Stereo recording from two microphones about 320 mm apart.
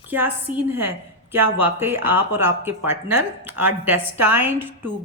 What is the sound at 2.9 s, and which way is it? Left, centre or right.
Speech, right.